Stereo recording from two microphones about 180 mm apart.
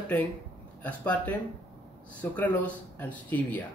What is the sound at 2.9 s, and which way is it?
Speech, 10° left (ahead or behind).